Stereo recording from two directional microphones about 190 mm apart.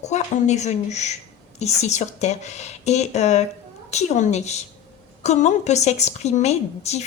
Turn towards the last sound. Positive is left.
turn(degrees=35)  # may be behind; listen again after turning